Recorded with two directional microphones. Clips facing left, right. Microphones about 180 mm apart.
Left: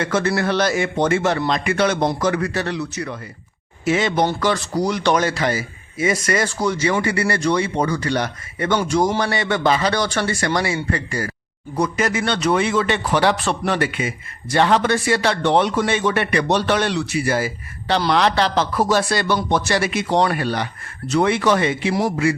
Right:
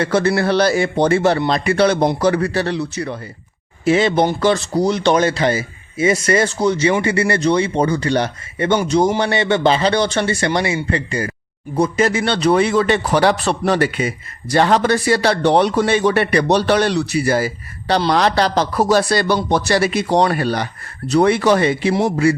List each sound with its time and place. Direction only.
0.0 s a man's voice: 35° right (ahead or behind)